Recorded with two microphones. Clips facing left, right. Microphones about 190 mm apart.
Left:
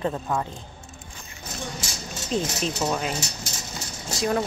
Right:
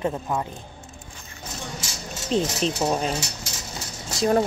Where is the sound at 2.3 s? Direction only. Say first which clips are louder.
Right 3 dB; 5° left (ahead or behind).